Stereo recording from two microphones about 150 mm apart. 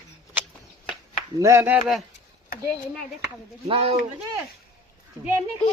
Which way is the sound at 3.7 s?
40° right (ahead or behind).